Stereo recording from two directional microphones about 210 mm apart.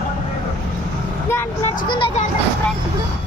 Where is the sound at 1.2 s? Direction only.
10° left (ahead or behind).